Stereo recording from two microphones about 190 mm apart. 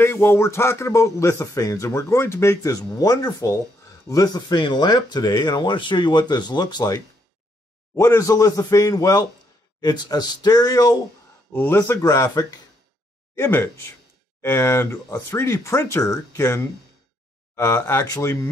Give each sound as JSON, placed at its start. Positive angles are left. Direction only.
{"t": 0.0, "sound": "speech", "side_deg": 10}